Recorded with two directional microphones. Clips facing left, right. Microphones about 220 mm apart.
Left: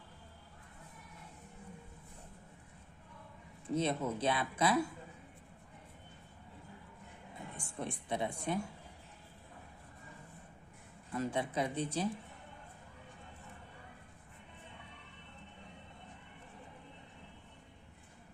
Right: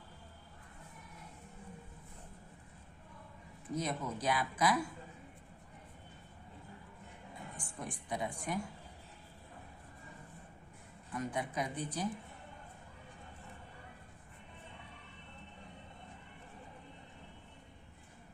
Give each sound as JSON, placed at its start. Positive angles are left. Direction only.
{"t": 3.7, "sound": "speech", "side_deg": 30}
{"t": 7.5, "sound": "a woman's voice", "side_deg": 25}
{"t": 11.1, "sound": "speech", "side_deg": 25}